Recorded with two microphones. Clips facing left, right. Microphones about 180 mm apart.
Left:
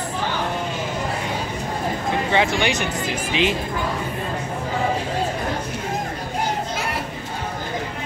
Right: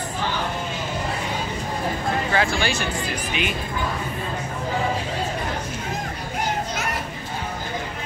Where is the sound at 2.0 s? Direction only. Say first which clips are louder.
Left 3 dB; 20° left (ahead or behind).